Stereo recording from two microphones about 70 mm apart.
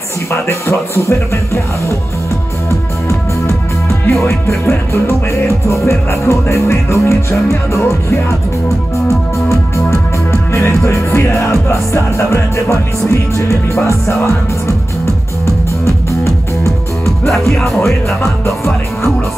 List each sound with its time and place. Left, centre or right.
0.3 s speech: left
4.0 s speech: left
5.7 s music: left
9.0 s music: left
13.7 s music: left
17.3 s music: centre